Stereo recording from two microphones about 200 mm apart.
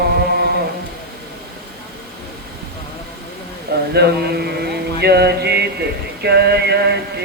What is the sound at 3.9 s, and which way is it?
Mantra, 55° right (ahead or behind).